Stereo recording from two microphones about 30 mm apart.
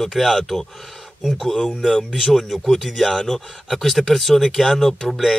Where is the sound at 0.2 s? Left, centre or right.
Centre.